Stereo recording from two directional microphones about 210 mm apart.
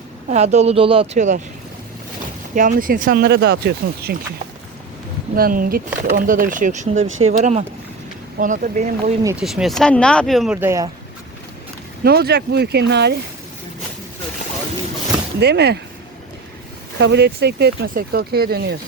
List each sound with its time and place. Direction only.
0.3 s speech: 30° right (ahead or behind)
2.6 s speech: 40° right (ahead or behind)
5.3 s speech: 45° right (ahead or behind)
9.2 s speech: 5° right (ahead or behind)
12.0 s speech: 50° right (ahead or behind)
15.4 s speech: 50° right (ahead or behind)
17.0 s speech: 55° right (ahead or behind)